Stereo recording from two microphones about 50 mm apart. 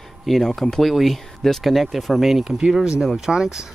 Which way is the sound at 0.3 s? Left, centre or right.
Centre.